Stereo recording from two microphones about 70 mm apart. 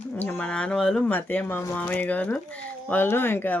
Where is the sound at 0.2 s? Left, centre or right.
Left; by 1.0 s centre.